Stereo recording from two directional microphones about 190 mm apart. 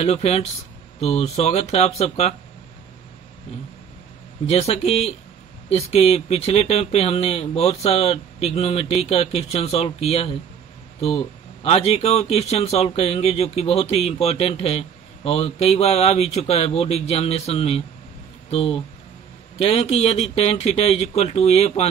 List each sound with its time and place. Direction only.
0.0 s speech: 35° left (ahead or behind)
4.5 s speech: 30° left (ahead or behind)